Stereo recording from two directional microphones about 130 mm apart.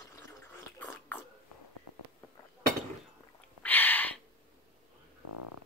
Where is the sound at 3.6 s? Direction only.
15° left (ahead or behind).